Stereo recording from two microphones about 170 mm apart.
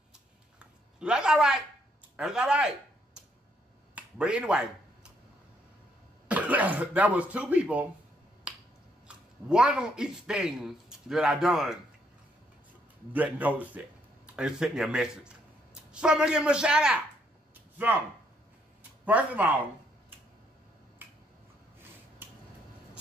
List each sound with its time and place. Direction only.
0.6 s a sound: 5° right (ahead or behind)
2.1 s speech: 5° right (ahead or behind)
3.9 s speech: 5° right (ahead or behind)
6.2 s speech: 10° right (ahead or behind)
8.5 s finger snapping: 5° right (ahead or behind)
9.0 s speech: 5° right (ahead or behind)
13.1 s a man's voice: 10° right (ahead or behind)
19.0 s speech: 10° right (ahead or behind)
22.2 s finger snapping: 10° right (ahead or behind)